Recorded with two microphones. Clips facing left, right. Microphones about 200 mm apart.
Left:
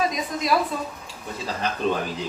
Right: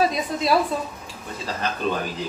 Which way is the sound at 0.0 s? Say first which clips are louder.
Right 3 dB; 30° right (ahead or behind).